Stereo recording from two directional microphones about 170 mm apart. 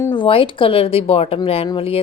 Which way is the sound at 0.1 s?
30° left (ahead or behind).